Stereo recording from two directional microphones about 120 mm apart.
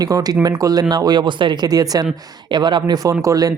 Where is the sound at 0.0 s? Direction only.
30° right (ahead or behind).